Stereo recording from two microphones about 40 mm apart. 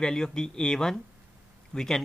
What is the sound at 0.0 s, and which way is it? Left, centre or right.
Speech, centre.